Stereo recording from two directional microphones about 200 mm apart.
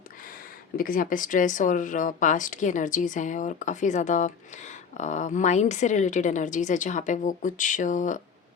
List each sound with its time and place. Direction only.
0.8 s speech: 45° left (ahead or behind)